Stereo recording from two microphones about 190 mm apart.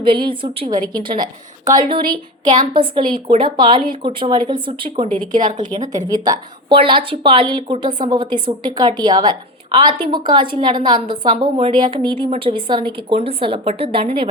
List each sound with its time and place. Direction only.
0.0 s a woman's voice: 25° right (ahead or behind)
5.1 s speech: 45° right (ahead or behind)
6.1 s a woman's voice: 20° right (ahead or behind)
7.9 s a woman's voice: 40° right (ahead or behind)
8.1 s a woman's voice: 25° right (ahead or behind)